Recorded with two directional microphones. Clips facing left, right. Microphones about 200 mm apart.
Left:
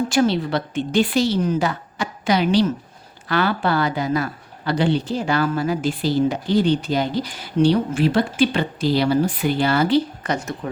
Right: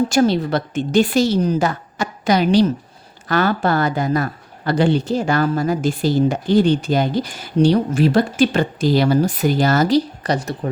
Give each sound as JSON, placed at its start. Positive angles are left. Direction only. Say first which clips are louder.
{"t": 0.1, "sound": "speech", "louder": "right 3 dB", "side_deg": -45}